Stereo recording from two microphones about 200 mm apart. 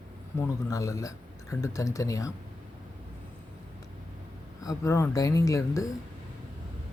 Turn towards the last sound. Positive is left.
turn(degrees=15)  # may be behind; listen again after turning